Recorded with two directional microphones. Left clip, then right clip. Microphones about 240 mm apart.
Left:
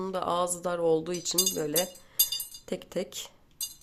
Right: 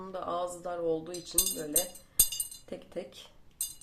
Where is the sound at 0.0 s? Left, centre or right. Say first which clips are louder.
Left 6 dB; left.